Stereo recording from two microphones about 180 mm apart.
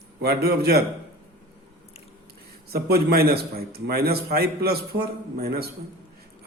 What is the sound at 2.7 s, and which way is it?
A man's voice, 60° right (ahead or behind).